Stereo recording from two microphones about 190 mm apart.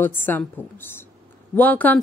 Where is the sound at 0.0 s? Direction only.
10° left (ahead or behind).